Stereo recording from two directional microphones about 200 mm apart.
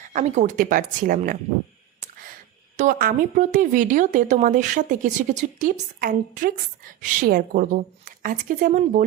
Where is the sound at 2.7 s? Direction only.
45° right (ahead or behind).